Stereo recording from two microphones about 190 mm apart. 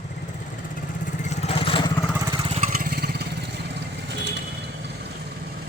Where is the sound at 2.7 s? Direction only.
55° right (ahead or behind).